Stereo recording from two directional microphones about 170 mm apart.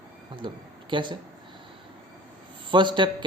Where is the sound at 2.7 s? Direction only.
30° right (ahead or behind).